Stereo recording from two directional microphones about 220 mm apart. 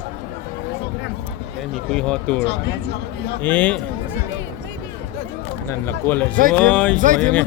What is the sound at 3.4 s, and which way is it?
Speech, 5° left (ahead or behind).